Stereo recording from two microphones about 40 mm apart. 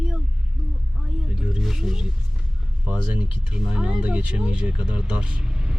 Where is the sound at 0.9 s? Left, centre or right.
Centre.